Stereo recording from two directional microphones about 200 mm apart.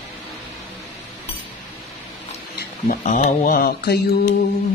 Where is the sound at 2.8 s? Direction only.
40° left (ahead or behind).